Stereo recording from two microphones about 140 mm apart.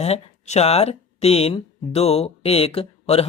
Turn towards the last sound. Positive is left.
turn(degrees=45)  # may be behind; listen again after turning